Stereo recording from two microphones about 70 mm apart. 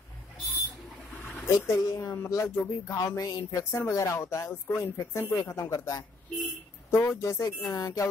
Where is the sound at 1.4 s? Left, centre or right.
Left.